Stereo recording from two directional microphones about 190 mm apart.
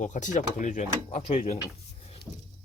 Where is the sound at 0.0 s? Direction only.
40° left (ahead or behind).